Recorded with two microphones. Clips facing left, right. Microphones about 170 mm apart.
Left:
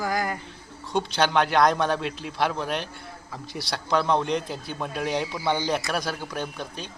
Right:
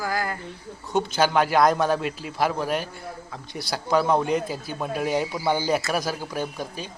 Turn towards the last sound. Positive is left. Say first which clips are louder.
# right 3 dB
turn(degrees=-5)  # may be behind; listen again after turning